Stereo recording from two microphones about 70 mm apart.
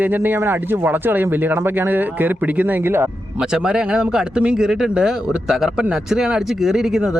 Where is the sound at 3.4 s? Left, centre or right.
Centre.